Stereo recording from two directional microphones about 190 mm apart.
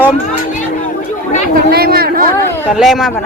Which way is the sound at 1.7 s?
55° right (ahead or behind).